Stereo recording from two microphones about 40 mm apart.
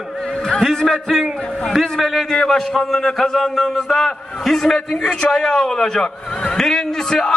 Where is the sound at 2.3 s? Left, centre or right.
Centre.